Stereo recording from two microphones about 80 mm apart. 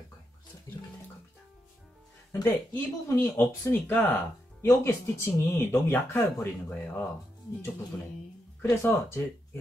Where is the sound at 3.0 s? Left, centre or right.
Left.